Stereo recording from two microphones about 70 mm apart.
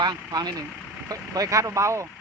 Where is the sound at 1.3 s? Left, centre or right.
Right.